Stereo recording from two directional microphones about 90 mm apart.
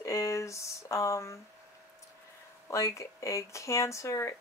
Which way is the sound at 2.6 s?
35° left (ahead or behind).